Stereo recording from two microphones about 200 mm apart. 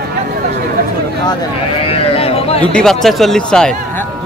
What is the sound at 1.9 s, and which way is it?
Sheep, 30° left (ahead or behind).